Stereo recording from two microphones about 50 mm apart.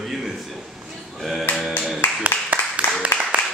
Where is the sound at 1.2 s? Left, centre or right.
Centre.